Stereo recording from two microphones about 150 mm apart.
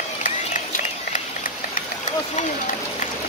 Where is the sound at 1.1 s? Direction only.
60° left (ahead or behind).